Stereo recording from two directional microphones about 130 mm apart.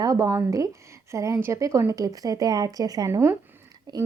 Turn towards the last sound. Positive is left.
turn(degrees=-25)  # may be behind; listen again after turning